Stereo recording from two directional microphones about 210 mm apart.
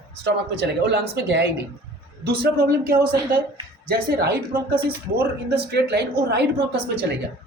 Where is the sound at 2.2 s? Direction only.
50° right (ahead or behind).